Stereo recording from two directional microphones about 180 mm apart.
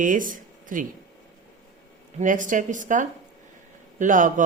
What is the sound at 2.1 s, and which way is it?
Speech, 45° right (ahead or behind).